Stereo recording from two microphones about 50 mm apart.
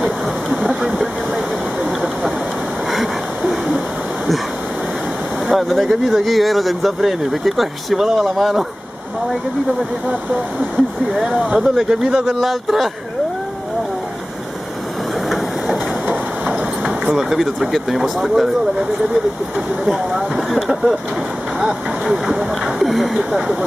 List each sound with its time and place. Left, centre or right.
0.7 s vehicle: centre
2.9 s a sound: centre
5.5 s speech: centre
11.5 s speech: centre
12.3 s speech: centre
15.2 s train: centre
16.4 s vehicle: right
17.2 s speech: centre
19.9 s speech: centre
22.2 s speech: centre